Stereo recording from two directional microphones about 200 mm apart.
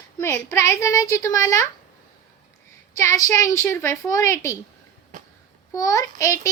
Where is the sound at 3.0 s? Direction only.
15° left (ahead or behind).